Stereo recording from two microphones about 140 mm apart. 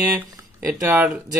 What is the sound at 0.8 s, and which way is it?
Speech, 5° right (ahead or behind).